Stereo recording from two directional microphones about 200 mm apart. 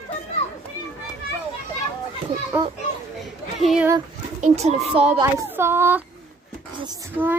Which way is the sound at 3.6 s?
Centre (ahead or behind).